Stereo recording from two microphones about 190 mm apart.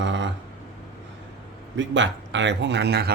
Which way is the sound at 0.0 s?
70° right (ahead or behind).